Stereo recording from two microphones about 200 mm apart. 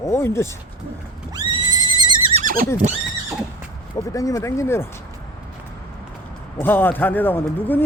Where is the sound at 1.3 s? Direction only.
20° right (ahead or behind).